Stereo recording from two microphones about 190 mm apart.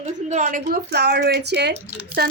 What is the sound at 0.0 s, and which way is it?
A woman's voice, 40° right (ahead or behind).